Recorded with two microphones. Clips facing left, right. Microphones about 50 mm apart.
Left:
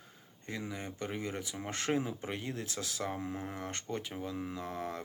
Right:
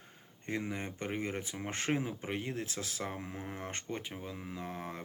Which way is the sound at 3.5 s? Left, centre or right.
Right.